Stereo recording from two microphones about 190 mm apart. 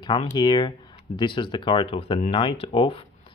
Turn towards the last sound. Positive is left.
turn(degrees=30)  # may be behind; listen again after turning